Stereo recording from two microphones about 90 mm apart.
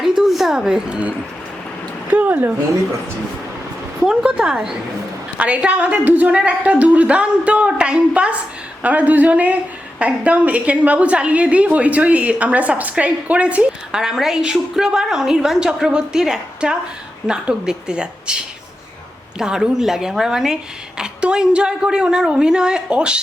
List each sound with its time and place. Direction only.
0.2 s speech: 5° right (ahead or behind); by 2.5 s 20° right (ahead or behind)
4.0 s a woman's voice: 10° right (ahead or behind)
19.4 s a woman's voice: 5° right (ahead or behind)